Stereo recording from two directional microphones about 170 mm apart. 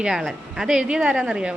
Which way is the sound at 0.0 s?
5° right (ahead or behind).